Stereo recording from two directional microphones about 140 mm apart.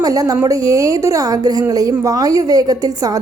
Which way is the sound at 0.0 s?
25° right (ahead or behind).